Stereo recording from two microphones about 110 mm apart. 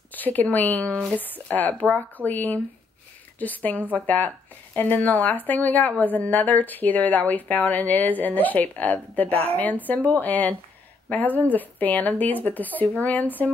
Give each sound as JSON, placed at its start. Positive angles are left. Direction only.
{"t": 0.1, "sound": "speech", "side_deg": 15}